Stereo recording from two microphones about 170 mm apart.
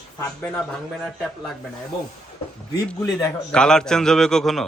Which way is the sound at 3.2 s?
10° left (ahead or behind).